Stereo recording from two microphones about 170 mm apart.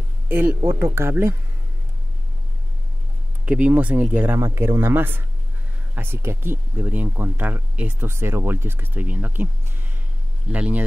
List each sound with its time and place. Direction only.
0.3 s speech: 10° right (ahead or behind)
3.4 s speech: 10° right (ahead or behind)
10.5 s speech: 10° right (ahead or behind)